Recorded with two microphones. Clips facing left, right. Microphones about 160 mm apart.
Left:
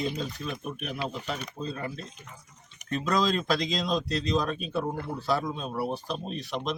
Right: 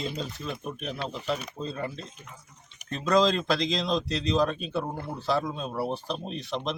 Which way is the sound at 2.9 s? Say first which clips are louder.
Right 3 dB; centre (ahead or behind).